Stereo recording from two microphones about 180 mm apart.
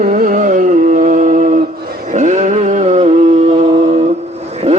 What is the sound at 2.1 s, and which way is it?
Music, 40° right (ahead or behind).